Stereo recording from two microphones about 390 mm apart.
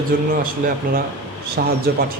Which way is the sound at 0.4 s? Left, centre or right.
Right.